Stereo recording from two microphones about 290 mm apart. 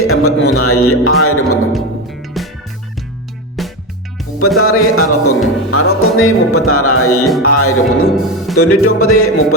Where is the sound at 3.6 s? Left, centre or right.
Centre.